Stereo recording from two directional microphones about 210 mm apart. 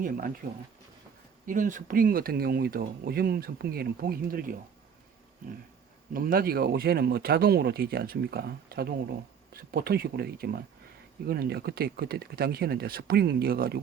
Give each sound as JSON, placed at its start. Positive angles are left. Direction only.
{"t": 1.5, "sound": "speech", "side_deg": -40}
{"t": 6.1, "sound": "speech", "side_deg": -45}